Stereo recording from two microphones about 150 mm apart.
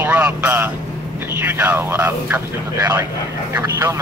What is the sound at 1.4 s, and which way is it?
Speech, 10° right (ahead or behind).